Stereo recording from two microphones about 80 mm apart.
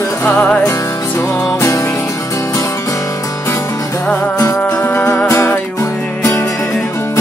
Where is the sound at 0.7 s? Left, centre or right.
Left.